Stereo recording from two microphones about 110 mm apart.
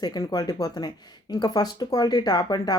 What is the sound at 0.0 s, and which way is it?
Speech, 40° left (ahead or behind).